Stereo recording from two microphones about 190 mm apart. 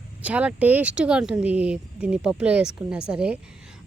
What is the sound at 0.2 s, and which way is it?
A woman's voice, 5° right (ahead or behind).